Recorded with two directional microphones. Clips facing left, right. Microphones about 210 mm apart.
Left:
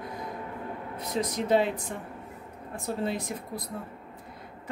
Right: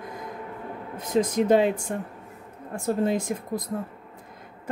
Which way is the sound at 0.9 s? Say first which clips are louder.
Right 8 dB; 50° right (ahead or behind).